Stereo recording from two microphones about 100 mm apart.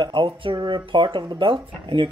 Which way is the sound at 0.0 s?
55° right (ahead or behind).